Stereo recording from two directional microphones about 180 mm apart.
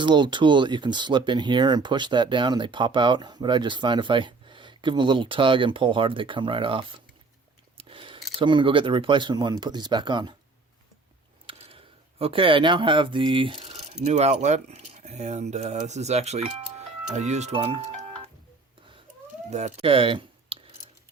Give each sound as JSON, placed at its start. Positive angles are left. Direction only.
{"t": 0.0, "sound": "speech", "side_deg": -25}
{"t": 7.8, "sound": "a sound", "side_deg": -30}
{"t": 8.4, "sound": "speech", "side_deg": -25}
{"t": 11.4, "sound": "a sound", "side_deg": -35}
{"t": 12.2, "sound": "speech", "side_deg": -30}
{"t": 19.5, "sound": "speech", "side_deg": -40}